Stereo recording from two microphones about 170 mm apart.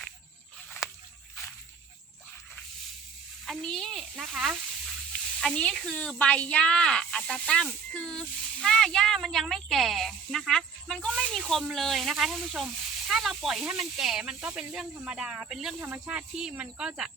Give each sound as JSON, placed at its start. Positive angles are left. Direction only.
{"t": 3.4, "sound": "speech", "side_deg": 0}